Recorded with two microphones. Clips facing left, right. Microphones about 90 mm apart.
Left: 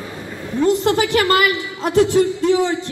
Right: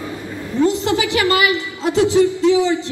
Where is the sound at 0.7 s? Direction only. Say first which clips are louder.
Left 2 dB; 50° left (ahead or behind).